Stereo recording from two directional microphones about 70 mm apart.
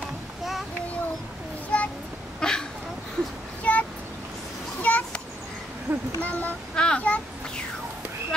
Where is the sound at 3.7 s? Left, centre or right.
Left.